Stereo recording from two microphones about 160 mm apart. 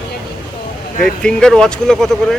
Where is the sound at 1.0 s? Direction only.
5° left (ahead or behind).